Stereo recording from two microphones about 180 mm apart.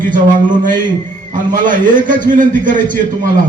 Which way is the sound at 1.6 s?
45° right (ahead or behind).